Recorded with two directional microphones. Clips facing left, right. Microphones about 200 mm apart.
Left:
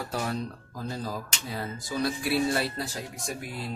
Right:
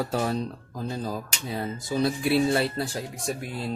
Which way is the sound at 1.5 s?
25° right (ahead or behind).